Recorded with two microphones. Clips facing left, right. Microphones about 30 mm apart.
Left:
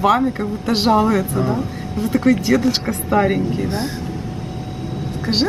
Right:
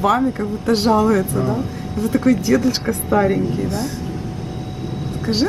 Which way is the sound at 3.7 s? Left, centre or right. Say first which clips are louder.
Even; left.